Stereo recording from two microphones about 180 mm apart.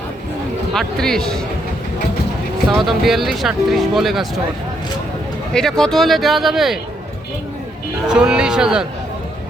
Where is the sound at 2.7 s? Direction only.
Centre (ahead or behind).